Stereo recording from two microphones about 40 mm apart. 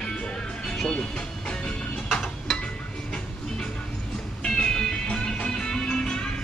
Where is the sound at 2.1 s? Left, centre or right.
Centre.